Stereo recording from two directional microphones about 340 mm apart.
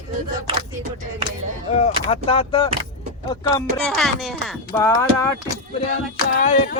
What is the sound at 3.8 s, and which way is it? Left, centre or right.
Music, centre.